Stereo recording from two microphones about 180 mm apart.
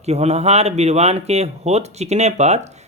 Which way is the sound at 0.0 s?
35° right (ahead or behind).